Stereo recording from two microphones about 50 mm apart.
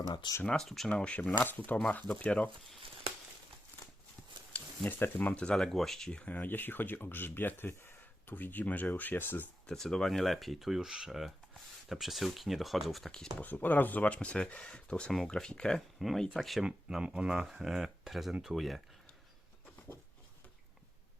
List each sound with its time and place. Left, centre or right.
0.6 s speech: centre
0.9 s speech: left
1.2 s speech: left
4.5 s speech: left
5.4 s speech: centre
6.2 s speech: left
9.6 s speech: centre
10.8 s speech: centre
13.4 s speech: left; by 16.6 s centre
16.6 s speech: centre
17.4 s speech: centre